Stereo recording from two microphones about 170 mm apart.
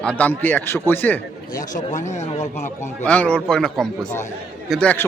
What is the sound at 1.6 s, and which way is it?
A man's voice, 50° left (ahead or behind).